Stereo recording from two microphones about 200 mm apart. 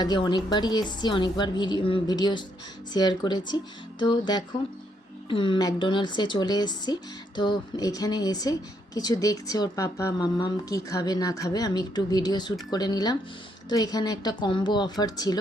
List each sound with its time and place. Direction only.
0.0 s speech: 20° left (ahead or behind)